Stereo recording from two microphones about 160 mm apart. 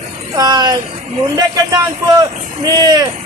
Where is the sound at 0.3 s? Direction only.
25° right (ahead or behind).